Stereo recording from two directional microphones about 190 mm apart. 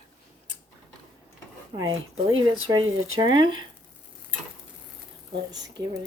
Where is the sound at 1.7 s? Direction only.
25° right (ahead or behind).